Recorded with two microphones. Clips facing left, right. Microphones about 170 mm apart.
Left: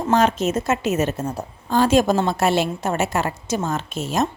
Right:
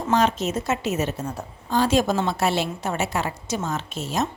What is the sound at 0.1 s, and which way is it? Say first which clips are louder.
A woman's voice: left 3 dB; 50° left (ahead or behind).